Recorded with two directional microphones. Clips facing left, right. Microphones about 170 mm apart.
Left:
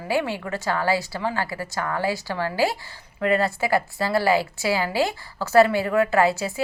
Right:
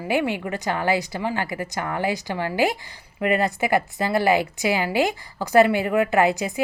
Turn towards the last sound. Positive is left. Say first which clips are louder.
# right 1 dB
turn(degrees=-15)  # may be behind; listen again after turning